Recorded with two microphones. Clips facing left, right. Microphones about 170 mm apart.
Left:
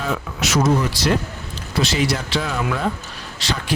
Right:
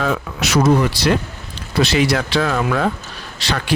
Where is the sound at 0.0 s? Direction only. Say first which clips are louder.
Right 4 dB; 65° right (ahead or behind).